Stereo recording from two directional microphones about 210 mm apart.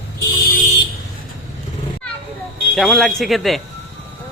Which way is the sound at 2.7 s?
Centre (ahead or behind).